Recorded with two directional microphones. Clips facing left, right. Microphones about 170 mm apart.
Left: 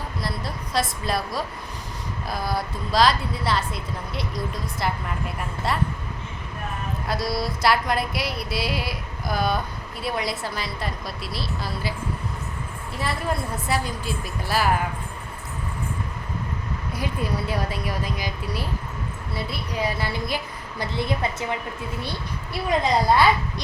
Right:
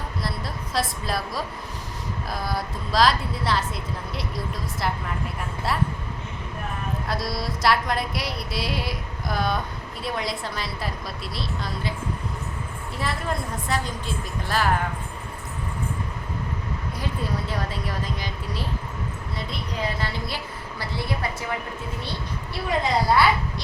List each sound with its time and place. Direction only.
0.2 s a woman's voice: centre (ahead or behind)
2.3 s a sound: centre (ahead or behind)
7.1 s a sound: centre (ahead or behind)
13.0 s a woman's voice: 5° left (ahead or behind)
17.0 s a woman's voice: 10° left (ahead or behind)
22.5 s a woman's voice: 20° left (ahead or behind)